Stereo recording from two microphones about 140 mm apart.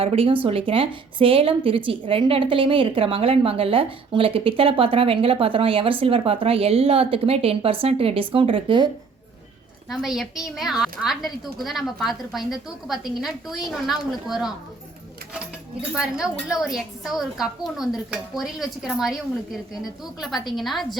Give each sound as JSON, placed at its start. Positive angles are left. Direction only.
{"t": 0.0, "sound": "a woman's voice", "side_deg": -45}
{"t": 9.9, "sound": "a woman's voice", "side_deg": 0}
{"t": 16.0, "sound": "a woman's voice", "side_deg": -5}